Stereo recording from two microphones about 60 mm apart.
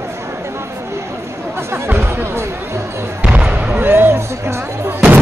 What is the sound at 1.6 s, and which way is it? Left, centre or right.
Music, right.